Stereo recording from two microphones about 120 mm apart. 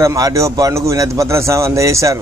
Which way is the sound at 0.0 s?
30° right (ahead or behind).